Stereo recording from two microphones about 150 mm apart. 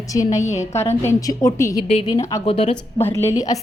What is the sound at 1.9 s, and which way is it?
Speech, 45° left (ahead or behind).